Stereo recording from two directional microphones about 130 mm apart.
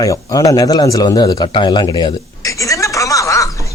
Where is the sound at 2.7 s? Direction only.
25° left (ahead or behind).